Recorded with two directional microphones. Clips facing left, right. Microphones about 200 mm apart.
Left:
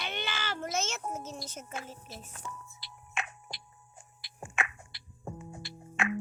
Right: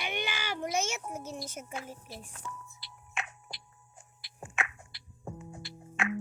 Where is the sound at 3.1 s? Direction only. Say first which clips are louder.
Left 1 dB; 55° left (ahead or behind).